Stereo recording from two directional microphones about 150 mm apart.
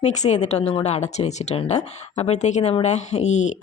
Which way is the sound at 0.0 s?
50° left (ahead or behind).